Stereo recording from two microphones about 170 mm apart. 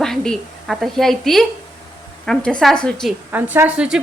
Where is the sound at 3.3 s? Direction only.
10° right (ahead or behind).